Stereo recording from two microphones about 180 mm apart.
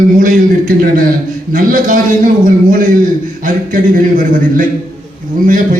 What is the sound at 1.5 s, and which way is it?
A man's voice, 50° right (ahead or behind).